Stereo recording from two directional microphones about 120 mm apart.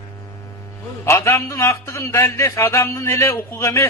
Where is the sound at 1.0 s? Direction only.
25° left (ahead or behind).